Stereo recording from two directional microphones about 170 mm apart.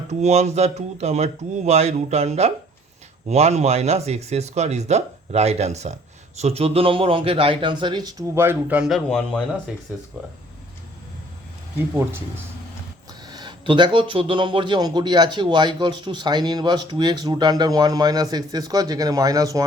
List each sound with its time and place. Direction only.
0.1 s speech: 40° right (ahead or behind); by 8.1 s 25° right (ahead or behind)
8.4 s a man's voice: 10° right (ahead or behind); by 9.4 s 5° left (ahead or behind)
13.2 s speech: 25° right (ahead or behind)